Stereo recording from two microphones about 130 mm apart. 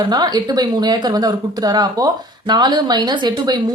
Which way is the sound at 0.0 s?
35° right (ahead or behind).